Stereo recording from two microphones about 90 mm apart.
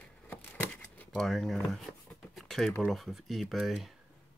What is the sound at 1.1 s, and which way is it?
Speech, centre (ahead or behind).